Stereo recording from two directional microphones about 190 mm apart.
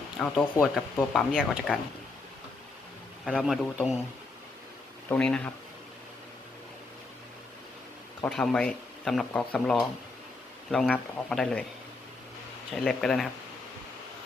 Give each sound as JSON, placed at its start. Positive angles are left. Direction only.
{"t": 0.2, "sound": "speech", "side_deg": 0}
{"t": 3.2, "sound": "speech", "side_deg": -5}
{"t": 5.0, "sound": "speech", "side_deg": 5}
{"t": 8.3, "sound": "speech", "side_deg": 5}
{"t": 12.7, "sound": "speech", "side_deg": 0}